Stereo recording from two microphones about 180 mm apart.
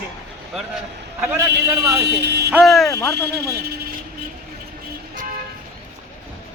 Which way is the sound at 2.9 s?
15° left (ahead or behind).